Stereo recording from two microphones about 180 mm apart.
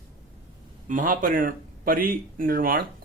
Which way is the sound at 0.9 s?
45° right (ahead or behind).